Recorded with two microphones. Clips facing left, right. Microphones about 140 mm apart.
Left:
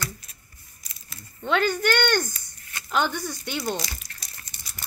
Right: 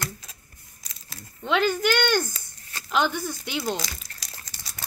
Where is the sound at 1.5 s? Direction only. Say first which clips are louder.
Even; 10° right (ahead or behind).